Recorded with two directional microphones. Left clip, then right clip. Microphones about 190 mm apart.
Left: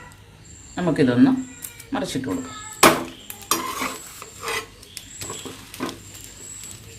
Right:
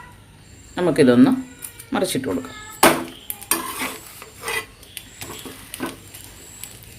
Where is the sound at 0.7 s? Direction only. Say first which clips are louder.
Right 5 dB; 45° right (ahead or behind).